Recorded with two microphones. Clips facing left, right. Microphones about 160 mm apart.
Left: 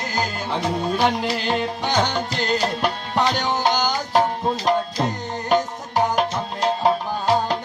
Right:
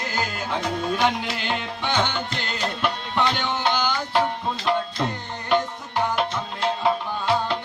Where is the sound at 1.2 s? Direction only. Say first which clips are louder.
Left 6 dB; 40° left (ahead or behind).